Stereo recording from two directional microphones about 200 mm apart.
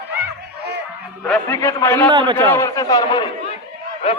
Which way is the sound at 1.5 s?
10° left (ahead or behind).